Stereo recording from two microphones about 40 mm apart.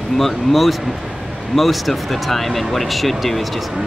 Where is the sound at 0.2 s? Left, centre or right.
Centre.